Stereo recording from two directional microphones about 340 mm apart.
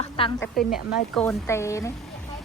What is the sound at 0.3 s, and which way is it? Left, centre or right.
A woman's voice, centre.